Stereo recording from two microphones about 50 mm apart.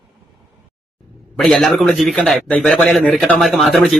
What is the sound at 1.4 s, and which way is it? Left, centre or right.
Speech, centre.